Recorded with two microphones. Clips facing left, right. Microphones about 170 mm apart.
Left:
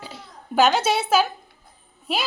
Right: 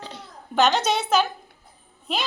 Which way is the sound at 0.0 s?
10° left (ahead or behind).